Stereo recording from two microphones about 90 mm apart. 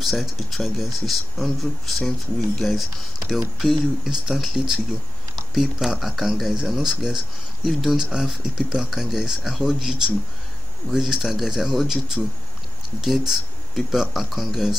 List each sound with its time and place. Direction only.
0.0 s speech: centre (ahead or behind)